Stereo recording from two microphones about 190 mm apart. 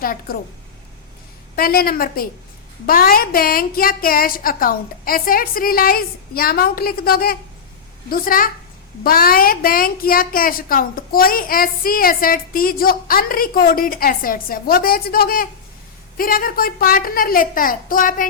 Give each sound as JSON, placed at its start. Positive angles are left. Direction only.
{"t": 0.0, "sound": "a woman's voice", "side_deg": 50}
{"t": 1.5, "sound": "a woman's voice", "side_deg": 50}